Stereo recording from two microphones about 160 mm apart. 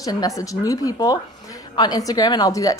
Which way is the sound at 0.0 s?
20° left (ahead or behind).